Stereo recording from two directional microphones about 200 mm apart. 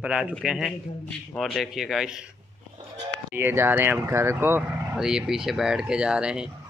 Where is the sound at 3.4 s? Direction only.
10° right (ahead or behind).